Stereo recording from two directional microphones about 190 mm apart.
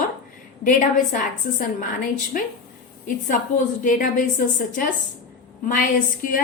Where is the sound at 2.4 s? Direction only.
45° left (ahead or behind).